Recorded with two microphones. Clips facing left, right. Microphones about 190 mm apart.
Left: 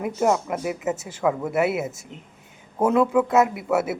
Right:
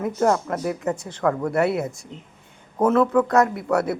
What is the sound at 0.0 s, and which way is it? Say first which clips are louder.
A man's voice: right 1 dB; 10° left (ahead or behind).